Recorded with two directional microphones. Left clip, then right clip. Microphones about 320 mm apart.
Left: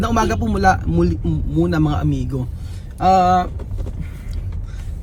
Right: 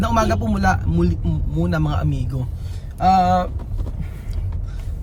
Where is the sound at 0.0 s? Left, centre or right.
Centre.